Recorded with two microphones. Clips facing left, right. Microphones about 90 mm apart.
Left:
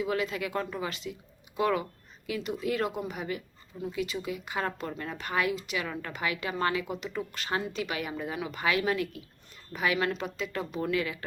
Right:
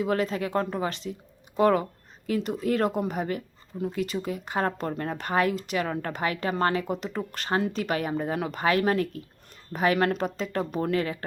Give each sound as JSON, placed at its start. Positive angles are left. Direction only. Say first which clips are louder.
{"t": 0.0, "sound": "speech", "louder": "right 4 dB", "side_deg": -45}